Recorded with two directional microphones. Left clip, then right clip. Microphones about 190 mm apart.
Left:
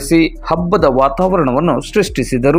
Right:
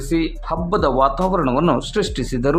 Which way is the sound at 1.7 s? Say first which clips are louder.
Left 6 dB; 15° left (ahead or behind).